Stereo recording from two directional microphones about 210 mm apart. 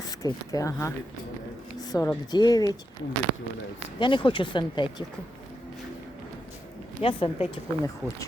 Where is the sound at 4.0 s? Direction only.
25° left (ahead or behind).